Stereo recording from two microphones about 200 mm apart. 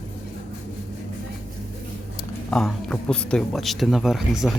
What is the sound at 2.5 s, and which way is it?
Speech, 5° left (ahead or behind).